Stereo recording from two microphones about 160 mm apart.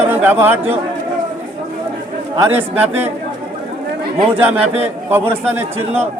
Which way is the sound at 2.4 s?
10° right (ahead or behind).